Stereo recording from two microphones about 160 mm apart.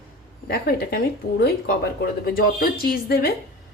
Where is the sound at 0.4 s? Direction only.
70° left (ahead or behind).